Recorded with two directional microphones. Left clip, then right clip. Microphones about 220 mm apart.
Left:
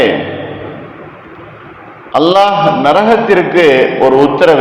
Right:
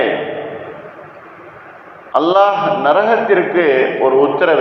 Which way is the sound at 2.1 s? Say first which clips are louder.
Left 3 dB; 50° left (ahead or behind).